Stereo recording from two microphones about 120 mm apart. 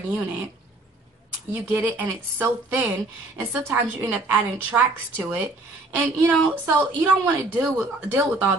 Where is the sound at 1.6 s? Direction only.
15° right (ahead or behind).